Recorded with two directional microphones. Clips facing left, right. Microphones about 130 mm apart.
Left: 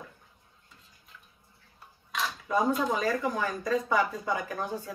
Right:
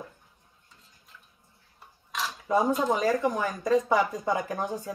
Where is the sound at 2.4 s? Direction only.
20° right (ahead or behind).